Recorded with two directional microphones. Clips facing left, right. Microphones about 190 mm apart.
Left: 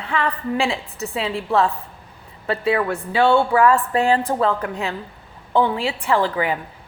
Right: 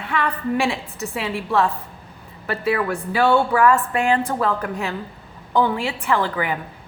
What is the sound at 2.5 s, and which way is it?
A woman's voice, 25° left (ahead or behind).